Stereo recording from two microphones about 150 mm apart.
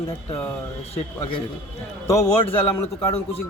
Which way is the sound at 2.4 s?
40° left (ahead or behind).